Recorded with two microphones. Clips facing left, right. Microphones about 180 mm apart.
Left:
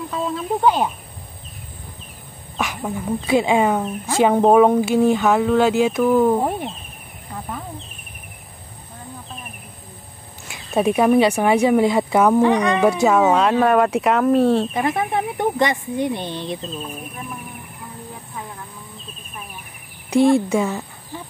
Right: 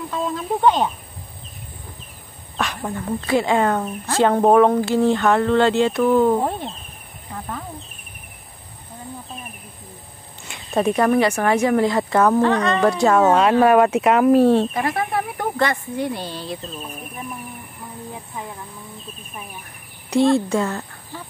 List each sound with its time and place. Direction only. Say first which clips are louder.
0.1 s speech: even; centre (ahead or behind)
2.5 s speech: left 1 dB; 5° left (ahead or behind)
7.3 s snake: even; 5° left (ahead or behind)
10.5 s speech: left 1 dB; 5° left (ahead or behind)
13.0 s speech: right 3 dB; centre (ahead or behind)
14.7 s speech: left 2 dB; 20° left (ahead or behind)
20.4 s speech: left 1 dB; 10° left (ahead or behind)